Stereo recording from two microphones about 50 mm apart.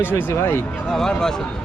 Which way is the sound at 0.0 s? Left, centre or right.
Left.